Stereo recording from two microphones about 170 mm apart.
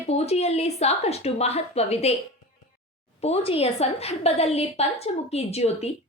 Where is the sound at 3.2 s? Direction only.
40° left (ahead or behind).